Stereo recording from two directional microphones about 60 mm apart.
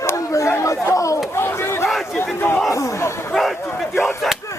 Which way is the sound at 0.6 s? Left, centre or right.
Left.